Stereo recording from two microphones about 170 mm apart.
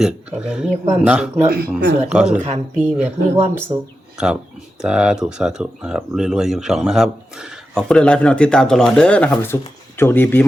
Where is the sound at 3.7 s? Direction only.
25° right (ahead or behind).